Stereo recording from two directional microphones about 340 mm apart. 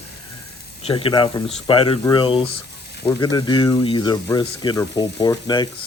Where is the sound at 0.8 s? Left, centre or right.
Centre.